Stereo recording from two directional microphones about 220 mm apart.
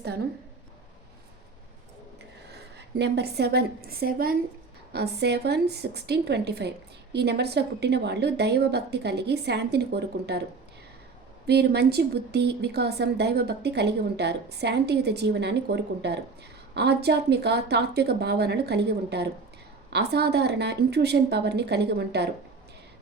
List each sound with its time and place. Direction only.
2.5 s a woman's voice: 50° right (ahead or behind)
11.4 s a woman's voice: 50° right (ahead or behind)